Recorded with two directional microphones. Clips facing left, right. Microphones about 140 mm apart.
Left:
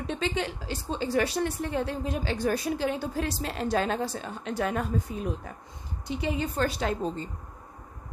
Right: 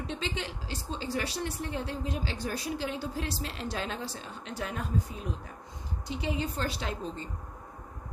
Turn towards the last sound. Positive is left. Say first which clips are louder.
# left 7 dB
turn(degrees=45)  # may be behind; listen again after turning